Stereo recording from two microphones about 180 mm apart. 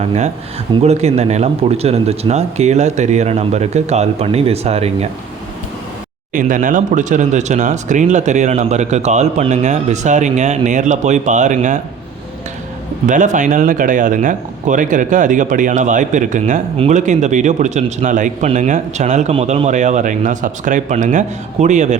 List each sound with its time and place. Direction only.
0.0 s speech: 35° right (ahead or behind)
6.3 s speech: 45° right (ahead or behind)
13.1 s speech: 45° right (ahead or behind)